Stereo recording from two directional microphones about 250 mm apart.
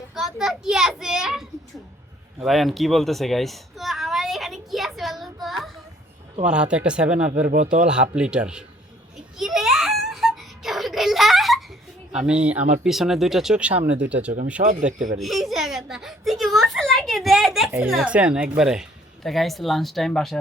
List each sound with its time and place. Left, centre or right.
0.1 s a sound: centre
6.4 s speech: centre
7.4 s speech: right
8.1 s speech: centre
9.4 s a sound: centre
12.1 s speech: centre
14.8 s speech: right
15.2 s a sound: centre
17.7 s speech: centre